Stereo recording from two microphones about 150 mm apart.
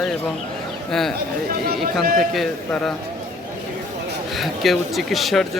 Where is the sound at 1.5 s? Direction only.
75° right (ahead or behind).